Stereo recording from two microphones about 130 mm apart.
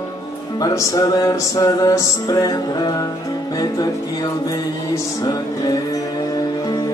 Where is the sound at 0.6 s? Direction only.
30° left (ahead or behind).